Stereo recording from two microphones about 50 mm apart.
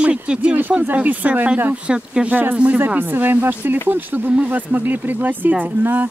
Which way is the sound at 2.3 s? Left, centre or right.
Right.